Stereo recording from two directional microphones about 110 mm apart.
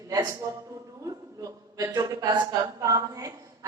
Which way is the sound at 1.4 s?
35° right (ahead or behind).